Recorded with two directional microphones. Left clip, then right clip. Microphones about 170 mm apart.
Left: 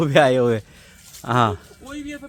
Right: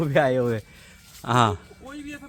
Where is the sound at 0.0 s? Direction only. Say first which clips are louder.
Left 5 dB; 70° left (ahead or behind).